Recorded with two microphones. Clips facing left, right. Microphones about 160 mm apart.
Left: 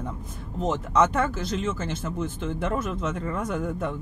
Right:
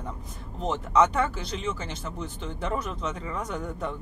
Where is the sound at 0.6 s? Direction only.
45° left (ahead or behind).